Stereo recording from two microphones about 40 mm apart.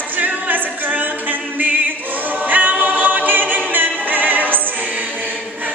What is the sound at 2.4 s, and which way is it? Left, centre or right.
Choir, right.